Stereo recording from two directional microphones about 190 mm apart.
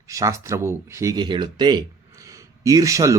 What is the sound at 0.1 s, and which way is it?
Speech, 15° right (ahead or behind).